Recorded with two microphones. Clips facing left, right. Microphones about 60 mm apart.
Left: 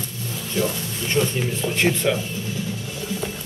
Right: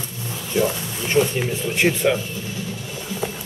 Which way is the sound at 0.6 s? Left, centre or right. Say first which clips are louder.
Right 3 dB; centre.